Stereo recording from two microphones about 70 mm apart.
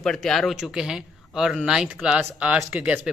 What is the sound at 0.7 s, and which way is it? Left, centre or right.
Speech, centre.